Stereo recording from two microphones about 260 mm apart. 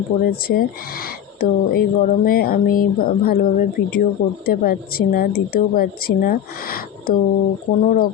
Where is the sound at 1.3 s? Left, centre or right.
Left.